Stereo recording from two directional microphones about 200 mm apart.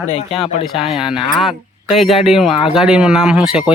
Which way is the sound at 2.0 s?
30° left (ahead or behind).